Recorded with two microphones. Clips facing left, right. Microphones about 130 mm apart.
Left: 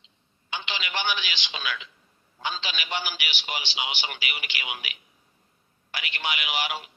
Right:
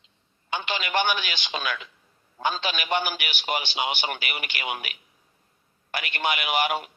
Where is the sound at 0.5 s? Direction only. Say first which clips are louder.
Right 6 dB; 50° right (ahead or behind).